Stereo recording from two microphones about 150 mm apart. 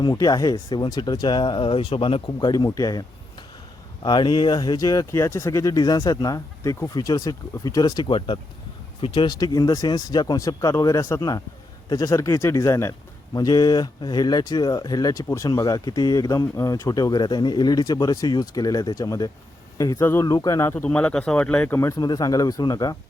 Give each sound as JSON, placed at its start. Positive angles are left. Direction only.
{"t": 0.0, "sound": "a man's voice", "side_deg": 25}